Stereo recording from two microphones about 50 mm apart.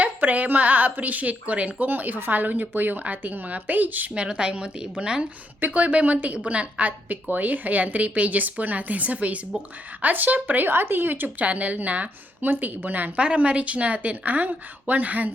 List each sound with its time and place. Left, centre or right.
0.0 s a woman's voice: right
1.9 s a woman's voice: right
4.1 s a woman's voice: right
5.5 s a woman's voice: right
13.1 s a woman's voice: right